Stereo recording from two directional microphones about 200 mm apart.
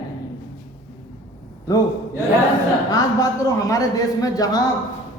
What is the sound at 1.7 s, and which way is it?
Speech, 15° left (ahead or behind).